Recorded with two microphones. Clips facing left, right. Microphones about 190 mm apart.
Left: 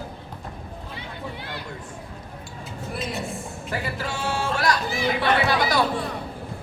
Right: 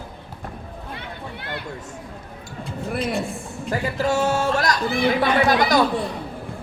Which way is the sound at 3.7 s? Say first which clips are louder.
Right 8 dB; 40° right (ahead or behind).